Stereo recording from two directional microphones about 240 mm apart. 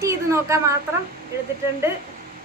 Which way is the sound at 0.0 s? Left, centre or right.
Centre.